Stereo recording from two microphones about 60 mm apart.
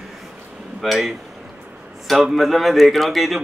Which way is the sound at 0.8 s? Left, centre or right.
Centre.